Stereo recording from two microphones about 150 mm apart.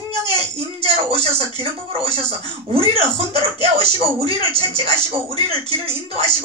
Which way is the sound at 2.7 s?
40° right (ahead or behind).